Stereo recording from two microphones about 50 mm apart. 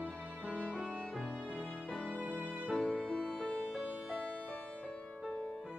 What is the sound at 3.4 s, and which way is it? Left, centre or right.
Music, left.